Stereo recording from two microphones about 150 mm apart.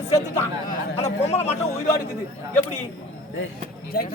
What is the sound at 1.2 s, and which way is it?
Speech, 45° left (ahead or behind).